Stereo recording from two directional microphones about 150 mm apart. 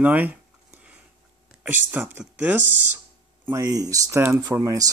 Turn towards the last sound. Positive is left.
turn(degrees=-20)  # may be behind; listen again after turning